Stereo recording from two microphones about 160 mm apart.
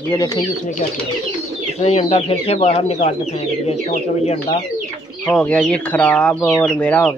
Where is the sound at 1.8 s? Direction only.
40° left (ahead or behind).